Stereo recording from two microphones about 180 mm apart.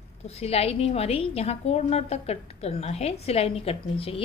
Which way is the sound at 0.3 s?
35° left (ahead or behind).